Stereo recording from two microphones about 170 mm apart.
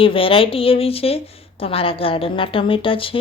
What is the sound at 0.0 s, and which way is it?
A woman's voice, 30° left (ahead or behind).